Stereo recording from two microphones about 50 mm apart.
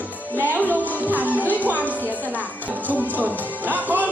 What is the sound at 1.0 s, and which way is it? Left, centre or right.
Music, right.